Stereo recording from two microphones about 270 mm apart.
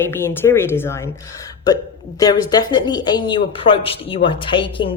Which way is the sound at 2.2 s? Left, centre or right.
Centre.